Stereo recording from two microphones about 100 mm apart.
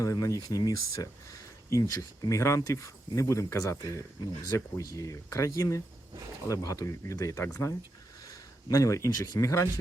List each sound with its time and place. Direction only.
0.0 s speech: 35° left (ahead or behind)